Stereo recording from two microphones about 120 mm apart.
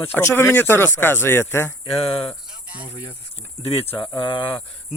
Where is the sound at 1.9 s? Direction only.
55° left (ahead or behind).